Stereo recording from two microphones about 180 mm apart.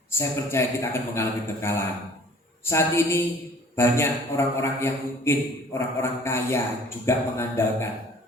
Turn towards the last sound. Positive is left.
turn(degrees=15)  # may be behind; listen again after turning